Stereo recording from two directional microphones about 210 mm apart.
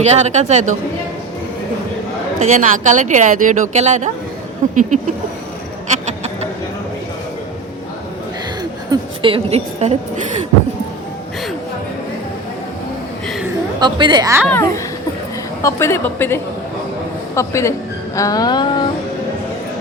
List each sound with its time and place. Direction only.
0.0 s a woman's voice: 30° right (ahead or behind)
2.6 s a woman's voice: 35° right (ahead or behind)
5.9 s a sound: 35° right (ahead or behind)
8.9 s a woman's voice: 25° right (ahead or behind)
13.7 s a woman's voice: 20° right (ahead or behind)
14.4 s speech: 10° left (ahead or behind)
18.2 s music: 15° left (ahead or behind)